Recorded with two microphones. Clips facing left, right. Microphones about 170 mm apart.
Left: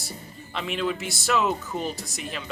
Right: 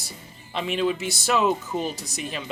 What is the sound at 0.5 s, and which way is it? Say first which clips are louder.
Speech: right 3 dB; 20° right (ahead or behind).